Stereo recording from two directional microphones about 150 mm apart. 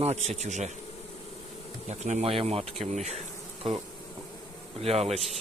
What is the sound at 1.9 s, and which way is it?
Speech, 50° right (ahead or behind).